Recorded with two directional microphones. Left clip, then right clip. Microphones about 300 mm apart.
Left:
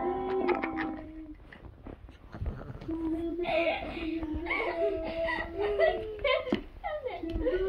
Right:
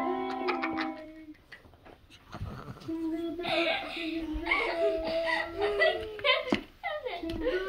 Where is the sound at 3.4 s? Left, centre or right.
Right.